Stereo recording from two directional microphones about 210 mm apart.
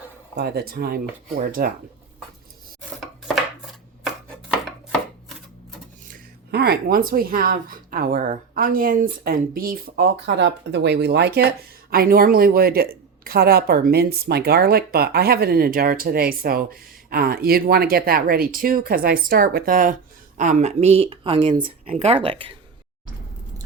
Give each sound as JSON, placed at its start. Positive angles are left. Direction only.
{"t": 0.3, "sound": "speech", "side_deg": -50}
{"t": 3.0, "sound": "chopping", "side_deg": 0}
{"t": 6.1, "sound": "speech", "side_deg": -45}